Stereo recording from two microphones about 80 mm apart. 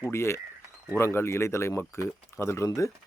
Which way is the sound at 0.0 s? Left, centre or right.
Left.